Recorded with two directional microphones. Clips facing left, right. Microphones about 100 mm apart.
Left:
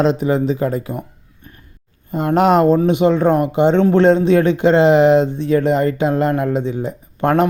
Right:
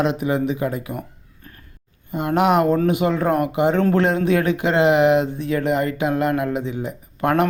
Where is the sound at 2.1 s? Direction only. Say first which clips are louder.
Left 4 dB; 35° left (ahead or behind).